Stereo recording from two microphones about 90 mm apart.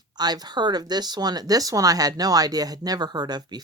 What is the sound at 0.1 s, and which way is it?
Speech, 50° right (ahead or behind).